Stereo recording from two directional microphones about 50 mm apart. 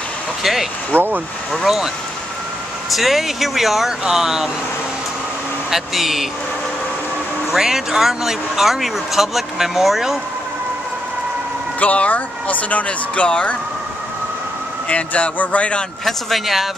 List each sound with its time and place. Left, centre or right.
0.4 s speech: centre
0.9 s speech: right
1.5 s speech: centre
2.9 s speech: centre
5.7 s speech: centre
7.5 s speech: centre
11.8 s speech: left
14.9 s speech: left
16.1 s speech: centre